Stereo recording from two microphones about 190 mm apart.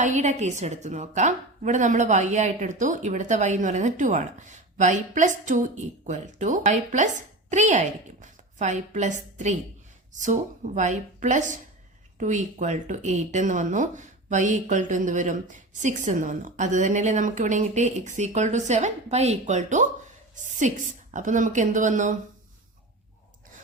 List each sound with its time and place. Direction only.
0.0 s a woman's voice: 40° right (ahead or behind)
10.8 s a woman's voice: 40° right (ahead or behind)